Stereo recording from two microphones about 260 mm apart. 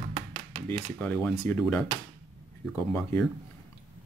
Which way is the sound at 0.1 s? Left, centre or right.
Right.